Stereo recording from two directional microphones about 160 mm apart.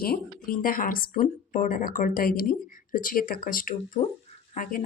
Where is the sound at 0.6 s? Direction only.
60° left (ahead or behind).